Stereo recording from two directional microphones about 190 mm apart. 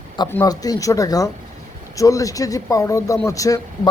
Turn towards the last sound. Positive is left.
turn(degrees=15)  # may be behind; listen again after turning